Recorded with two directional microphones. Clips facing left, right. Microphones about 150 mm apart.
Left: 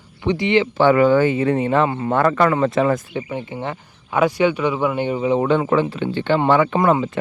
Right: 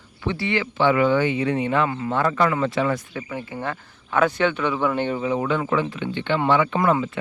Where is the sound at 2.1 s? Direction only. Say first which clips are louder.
Left 5 dB; 60° left (ahead or behind).